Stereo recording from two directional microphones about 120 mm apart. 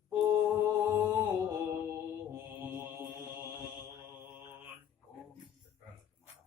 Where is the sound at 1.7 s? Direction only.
20° right (ahead or behind).